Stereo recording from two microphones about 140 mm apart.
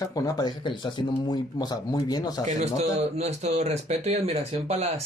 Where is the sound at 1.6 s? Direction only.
30° left (ahead or behind).